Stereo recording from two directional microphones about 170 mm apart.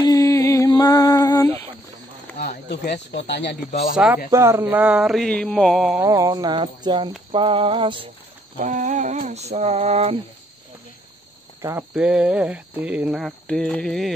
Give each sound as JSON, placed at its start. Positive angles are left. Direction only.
{"t": 0.0, "sound": "music", "side_deg": 20}
{"t": 2.4, "sound": "a sound", "side_deg": 60}
{"t": 3.2, "sound": "speech", "side_deg": 85}
{"t": 3.9, "sound": "speech", "side_deg": -5}
{"t": 4.3, "sound": "speech", "side_deg": -15}
{"t": 5.9, "sound": "a sound", "side_deg": -20}
{"t": 8.5, "sound": "speech", "side_deg": -45}
{"t": 11.9, "sound": "speech", "side_deg": -5}